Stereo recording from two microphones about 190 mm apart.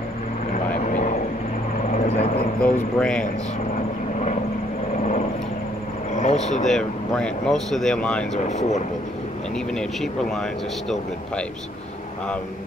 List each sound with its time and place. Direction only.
0.7 s vehicle: 40° left (ahead or behind)
2.6 s speech: 5° left (ahead or behind)
6.1 s speech: 35° left (ahead or behind)
6.7 s speech: 5° left (ahead or behind)
8.5 s speech: 40° left (ahead or behind)